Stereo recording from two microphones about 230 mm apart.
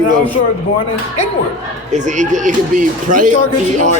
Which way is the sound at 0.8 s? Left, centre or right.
Left.